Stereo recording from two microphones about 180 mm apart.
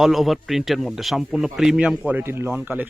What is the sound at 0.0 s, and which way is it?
Speech, centre (ahead or behind).